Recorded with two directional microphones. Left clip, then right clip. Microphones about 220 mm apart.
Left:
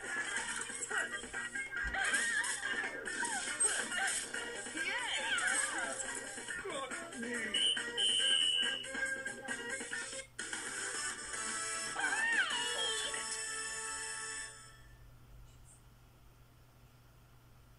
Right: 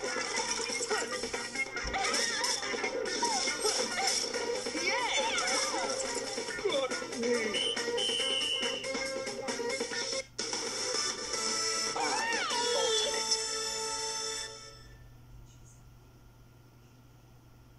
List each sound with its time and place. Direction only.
0.1 s music: 20° right (ahead or behind)